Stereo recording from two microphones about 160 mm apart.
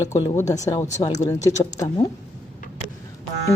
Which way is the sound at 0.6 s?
20° left (ahead or behind).